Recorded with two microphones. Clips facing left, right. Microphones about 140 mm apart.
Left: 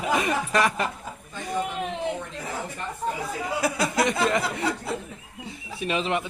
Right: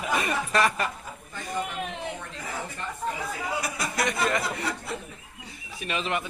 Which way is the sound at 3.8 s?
25° left (ahead or behind).